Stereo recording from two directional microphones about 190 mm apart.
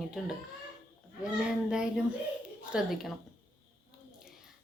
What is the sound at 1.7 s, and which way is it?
Speech, 5° right (ahead or behind).